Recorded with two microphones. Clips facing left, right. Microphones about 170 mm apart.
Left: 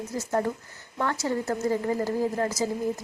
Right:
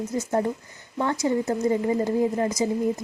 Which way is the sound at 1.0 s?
15° right (ahead or behind).